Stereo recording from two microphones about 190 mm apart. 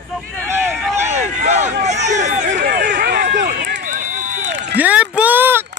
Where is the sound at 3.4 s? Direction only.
50° right (ahead or behind).